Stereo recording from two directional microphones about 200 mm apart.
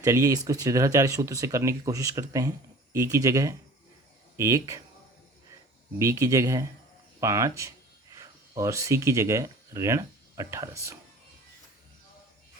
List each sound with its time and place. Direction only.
0.0 s speech: 15° right (ahead or behind)
6.0 s speech: 15° right (ahead or behind)